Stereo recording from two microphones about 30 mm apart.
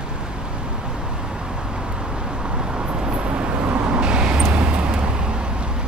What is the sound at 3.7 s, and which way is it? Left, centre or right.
Vehicle, right.